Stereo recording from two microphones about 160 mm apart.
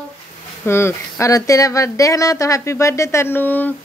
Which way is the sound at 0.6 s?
15° left (ahead or behind).